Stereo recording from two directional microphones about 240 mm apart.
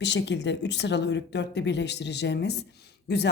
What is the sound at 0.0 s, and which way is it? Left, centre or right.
A woman's voice, left.